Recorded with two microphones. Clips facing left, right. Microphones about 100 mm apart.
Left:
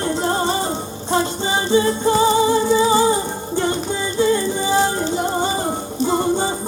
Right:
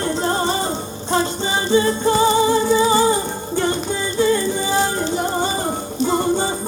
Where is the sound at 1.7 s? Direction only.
15° left (ahead or behind).